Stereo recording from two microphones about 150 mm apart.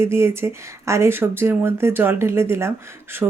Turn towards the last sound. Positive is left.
turn(degrees=-5)  # may be behind; listen again after turning